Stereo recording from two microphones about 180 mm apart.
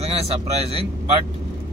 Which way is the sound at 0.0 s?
35° right (ahead or behind).